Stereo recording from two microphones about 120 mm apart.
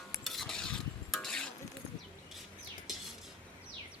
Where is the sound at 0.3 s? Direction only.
5° left (ahead or behind).